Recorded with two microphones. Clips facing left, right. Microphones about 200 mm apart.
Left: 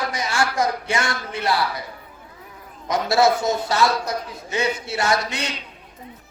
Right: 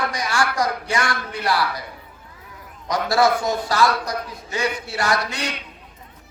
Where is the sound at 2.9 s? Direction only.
25° left (ahead or behind).